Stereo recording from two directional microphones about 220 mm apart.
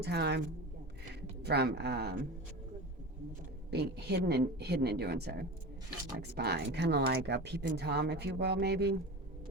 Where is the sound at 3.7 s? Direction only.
45° right (ahead or behind).